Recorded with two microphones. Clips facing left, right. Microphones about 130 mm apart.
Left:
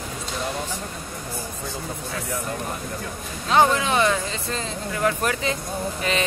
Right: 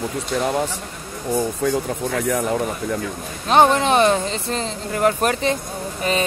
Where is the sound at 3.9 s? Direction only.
25° right (ahead or behind).